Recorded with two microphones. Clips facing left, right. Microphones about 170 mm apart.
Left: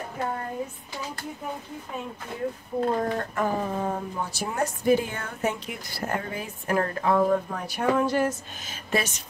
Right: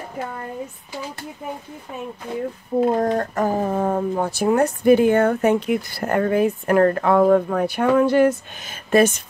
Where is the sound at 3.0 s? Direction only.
45° right (ahead or behind).